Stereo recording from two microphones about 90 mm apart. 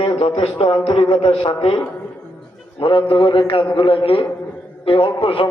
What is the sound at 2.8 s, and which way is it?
Speech, 75° left (ahead or behind).